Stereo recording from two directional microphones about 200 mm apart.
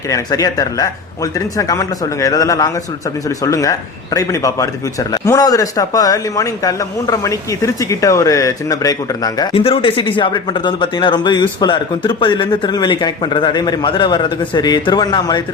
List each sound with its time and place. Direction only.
0.1 s speech: 15° left (ahead or behind)